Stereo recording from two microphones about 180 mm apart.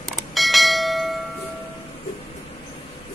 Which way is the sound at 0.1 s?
Centre (ahead or behind).